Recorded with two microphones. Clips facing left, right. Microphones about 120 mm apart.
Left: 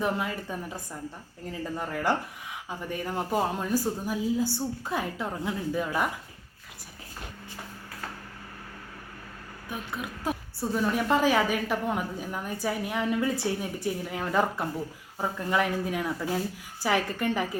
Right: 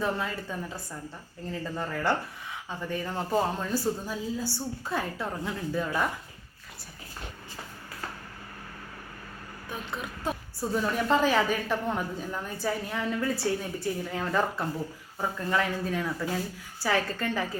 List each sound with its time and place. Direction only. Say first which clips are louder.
0.0 s a woman's voice: left 1 dB; 15° left (ahead or behind)
9.6 s a woman's voice: left 1 dB; 10° left (ahead or behind)